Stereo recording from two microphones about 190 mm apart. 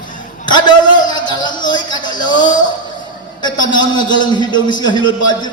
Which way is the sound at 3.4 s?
25° left (ahead or behind).